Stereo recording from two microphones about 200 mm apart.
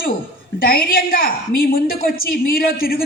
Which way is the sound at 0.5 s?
45° left (ahead or behind).